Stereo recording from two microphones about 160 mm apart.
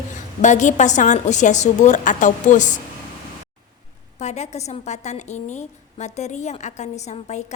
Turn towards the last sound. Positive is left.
turn(degrees=45)  # may be behind; listen again after turning